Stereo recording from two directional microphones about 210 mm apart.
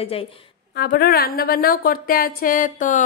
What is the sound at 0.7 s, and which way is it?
A woman's voice, 50° left (ahead or behind).